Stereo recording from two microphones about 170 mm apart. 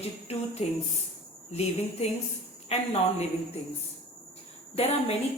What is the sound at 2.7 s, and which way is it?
Speech, 40° left (ahead or behind).